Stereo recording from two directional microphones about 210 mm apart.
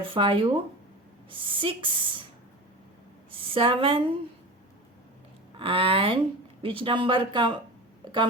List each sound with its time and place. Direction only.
0.0 s speech: 25° right (ahead or behind)
3.5 s speech: 25° right (ahead or behind)
5.5 s speech: 25° right (ahead or behind)